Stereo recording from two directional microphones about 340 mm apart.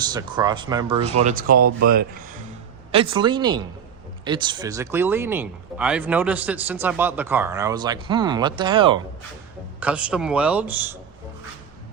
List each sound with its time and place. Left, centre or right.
0.0 s speech: centre
2.9 s speech: centre
9.8 s a man's voice: centre